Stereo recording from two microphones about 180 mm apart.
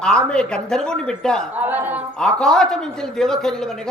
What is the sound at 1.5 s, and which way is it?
Speech, 10° right (ahead or behind).